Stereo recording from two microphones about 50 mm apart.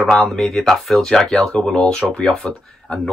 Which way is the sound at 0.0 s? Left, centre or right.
Centre.